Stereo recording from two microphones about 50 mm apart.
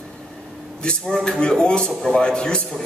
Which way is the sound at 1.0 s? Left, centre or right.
Centre.